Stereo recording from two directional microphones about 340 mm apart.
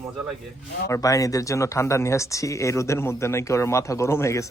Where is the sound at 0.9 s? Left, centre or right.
Centre.